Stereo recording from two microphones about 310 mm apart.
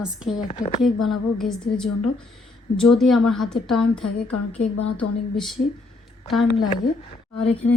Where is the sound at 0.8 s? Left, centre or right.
Centre.